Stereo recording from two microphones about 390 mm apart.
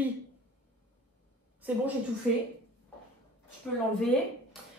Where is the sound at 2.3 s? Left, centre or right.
Centre.